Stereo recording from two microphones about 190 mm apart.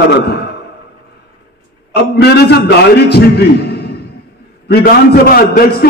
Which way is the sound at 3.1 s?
60° left (ahead or behind).